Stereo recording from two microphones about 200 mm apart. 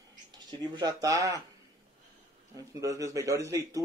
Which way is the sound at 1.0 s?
15° right (ahead or behind).